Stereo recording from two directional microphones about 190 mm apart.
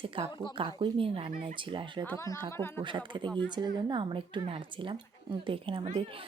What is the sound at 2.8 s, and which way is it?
Speech, 25° right (ahead or behind).